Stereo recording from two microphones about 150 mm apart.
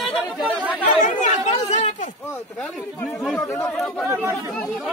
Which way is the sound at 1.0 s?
50° left (ahead or behind).